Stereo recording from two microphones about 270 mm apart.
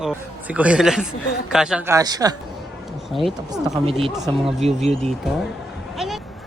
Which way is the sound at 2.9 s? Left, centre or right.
Centre.